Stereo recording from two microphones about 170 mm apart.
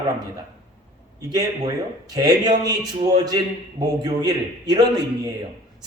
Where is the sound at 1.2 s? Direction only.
20° right (ahead or behind).